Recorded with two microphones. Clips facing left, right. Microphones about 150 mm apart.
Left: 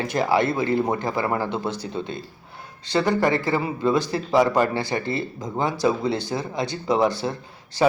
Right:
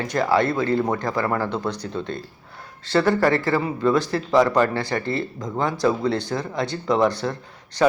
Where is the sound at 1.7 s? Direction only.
5° left (ahead or behind).